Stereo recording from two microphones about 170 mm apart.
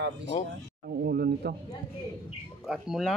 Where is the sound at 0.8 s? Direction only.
65° right (ahead or behind).